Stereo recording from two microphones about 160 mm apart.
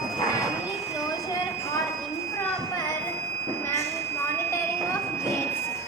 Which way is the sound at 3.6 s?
20° left (ahead or behind).